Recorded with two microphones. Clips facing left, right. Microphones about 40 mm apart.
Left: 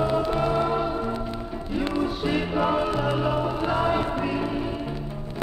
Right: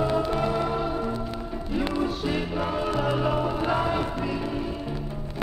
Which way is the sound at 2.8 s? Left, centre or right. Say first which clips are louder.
Left 1 dB; centre.